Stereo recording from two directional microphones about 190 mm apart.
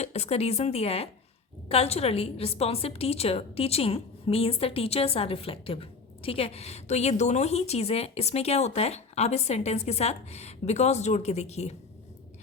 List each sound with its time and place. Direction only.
0.0 s a woman's voice: 35° left (ahead or behind)